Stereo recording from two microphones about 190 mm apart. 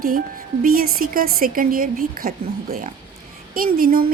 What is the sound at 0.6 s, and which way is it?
A woman's voice, 50° right (ahead or behind).